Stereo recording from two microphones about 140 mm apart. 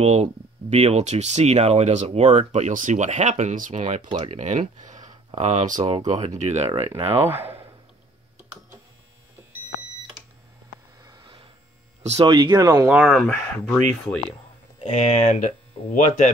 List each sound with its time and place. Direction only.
0.0 s speech: 50° right (ahead or behind)
7.2 s a sound: 15° right (ahead or behind)
11.0 s a sound: 30° right (ahead or behind)
12.0 s speech: 50° right (ahead or behind)
12.3 s speech: 30° right (ahead or behind)
12.9 s speech: centre (ahead or behind)
14.9 s speech: 55° left (ahead or behind)